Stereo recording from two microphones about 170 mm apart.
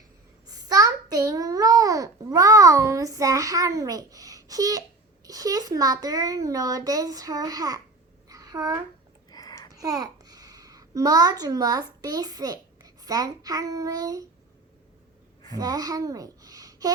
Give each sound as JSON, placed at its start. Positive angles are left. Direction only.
{"t": 0.4, "sound": "a sound", "side_deg": -20}
{"t": 5.2, "sound": "a child's voice", "side_deg": -20}
{"t": 8.3, "sound": "babbling", "side_deg": -20}
{"t": 9.3, "sound": "a sound", "side_deg": 20}
{"t": 9.7, "sound": "a child's voice", "side_deg": -20}
{"t": 15.5, "sound": "a child's voice", "side_deg": -20}